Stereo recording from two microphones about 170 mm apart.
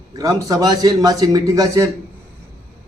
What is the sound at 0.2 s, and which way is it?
A man's voice, 20° right (ahead or behind).